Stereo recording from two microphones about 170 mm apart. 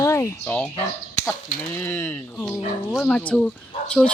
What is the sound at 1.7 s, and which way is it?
Speech, 10° left (ahead or behind).